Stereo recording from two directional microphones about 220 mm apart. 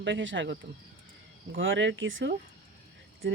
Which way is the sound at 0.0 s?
55° right (ahead or behind).